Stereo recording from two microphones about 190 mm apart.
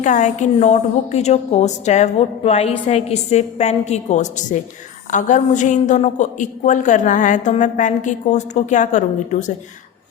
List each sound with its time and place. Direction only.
0.0 s a woman's voice: 40° left (ahead or behind)